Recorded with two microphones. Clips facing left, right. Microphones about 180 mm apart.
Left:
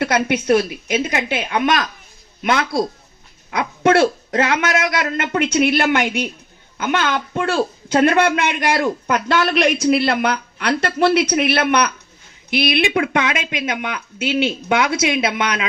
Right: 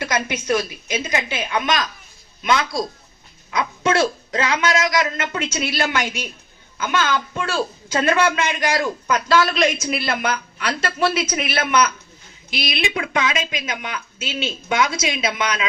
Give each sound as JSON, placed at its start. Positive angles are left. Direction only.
{"t": 0.0, "sound": "speech", "side_deg": 60}